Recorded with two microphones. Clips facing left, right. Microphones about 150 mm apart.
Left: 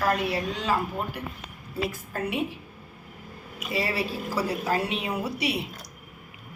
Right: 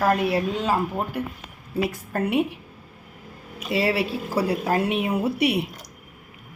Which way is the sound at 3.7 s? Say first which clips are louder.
Right 6 dB; 70° right (ahead or behind).